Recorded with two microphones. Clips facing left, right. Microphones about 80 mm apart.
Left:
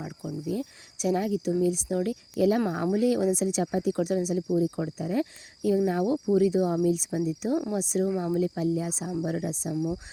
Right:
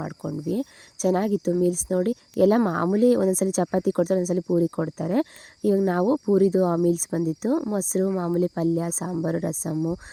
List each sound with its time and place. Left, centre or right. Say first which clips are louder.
0.0 s speech: right 5 dB; right
8.4 s speech: right 4 dB; right